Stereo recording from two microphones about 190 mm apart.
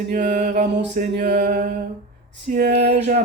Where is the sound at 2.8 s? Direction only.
35° right (ahead or behind).